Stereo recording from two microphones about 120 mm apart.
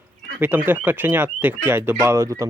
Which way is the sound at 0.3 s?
15° right (ahead or behind).